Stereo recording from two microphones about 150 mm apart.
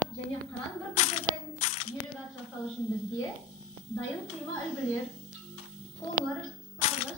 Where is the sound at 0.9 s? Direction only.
45° left (ahead or behind).